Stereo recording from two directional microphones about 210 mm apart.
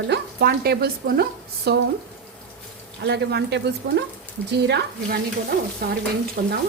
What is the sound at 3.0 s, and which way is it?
A woman's voice, 50° right (ahead or behind).